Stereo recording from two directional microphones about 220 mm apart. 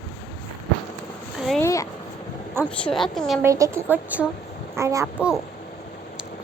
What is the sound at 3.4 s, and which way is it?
A woman's voice, 15° right (ahead or behind).